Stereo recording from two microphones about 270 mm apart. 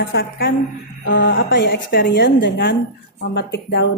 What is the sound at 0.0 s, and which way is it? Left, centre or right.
A woman's voice, left.